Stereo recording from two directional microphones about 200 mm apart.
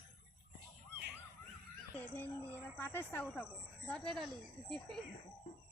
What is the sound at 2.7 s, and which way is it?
Speech, 10° left (ahead or behind).